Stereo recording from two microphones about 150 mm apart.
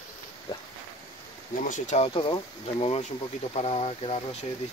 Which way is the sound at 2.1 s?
35° left (ahead or behind).